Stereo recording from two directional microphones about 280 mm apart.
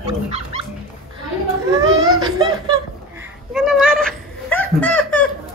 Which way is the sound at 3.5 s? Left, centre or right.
Centre.